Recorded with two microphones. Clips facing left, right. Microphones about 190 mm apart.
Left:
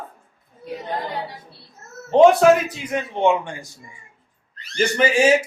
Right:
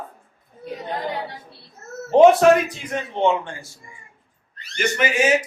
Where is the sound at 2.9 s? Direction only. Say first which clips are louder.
Left 2 dB; 10° left (ahead or behind).